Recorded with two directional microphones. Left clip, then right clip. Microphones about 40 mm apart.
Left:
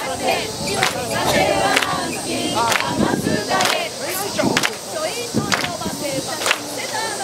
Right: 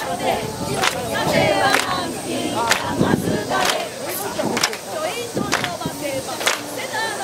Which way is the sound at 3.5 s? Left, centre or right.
Centre.